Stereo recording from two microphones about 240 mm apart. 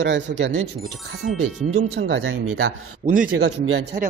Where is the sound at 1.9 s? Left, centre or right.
Right.